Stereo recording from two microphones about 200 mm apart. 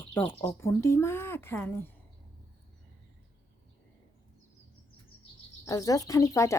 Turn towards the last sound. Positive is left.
turn(degrees=15)  # may be behind; listen again after turning